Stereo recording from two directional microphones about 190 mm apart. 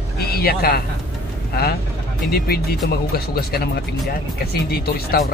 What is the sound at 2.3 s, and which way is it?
Speech, 55° left (ahead or behind).